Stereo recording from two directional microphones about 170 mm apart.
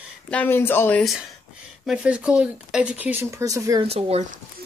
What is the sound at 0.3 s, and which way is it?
Speech, 10° left (ahead or behind).